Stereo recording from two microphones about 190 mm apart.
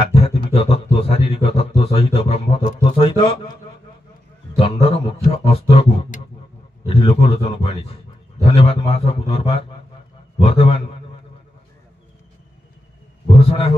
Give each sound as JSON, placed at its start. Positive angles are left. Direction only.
{"t": 0.1, "sound": "a sound", "side_deg": 30}
{"t": 4.6, "sound": "a man's voice", "side_deg": 30}
{"t": 13.4, "sound": "a man's voice", "side_deg": 30}